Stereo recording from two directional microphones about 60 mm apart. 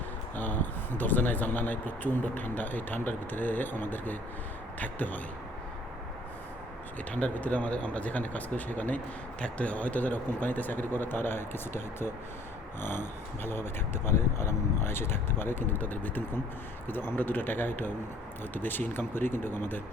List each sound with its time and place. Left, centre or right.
0.3 s speech: left
7.1 s speech: left